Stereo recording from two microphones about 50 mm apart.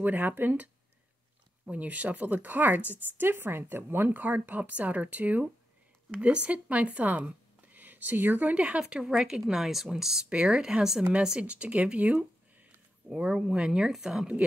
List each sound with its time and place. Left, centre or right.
0.0 s speech: right
1.7 s speech: right; by 14.3 s centre